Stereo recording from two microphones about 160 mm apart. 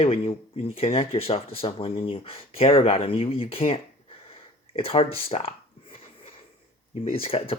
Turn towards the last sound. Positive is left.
turn(degrees=35)  # may be behind; listen again after turning